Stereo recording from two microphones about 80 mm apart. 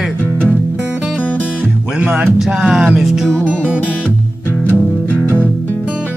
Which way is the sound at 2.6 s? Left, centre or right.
Centre.